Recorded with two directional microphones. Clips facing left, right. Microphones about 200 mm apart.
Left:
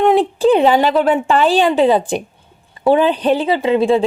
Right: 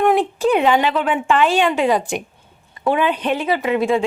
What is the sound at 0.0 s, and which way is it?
Speech, 30° left (ahead or behind).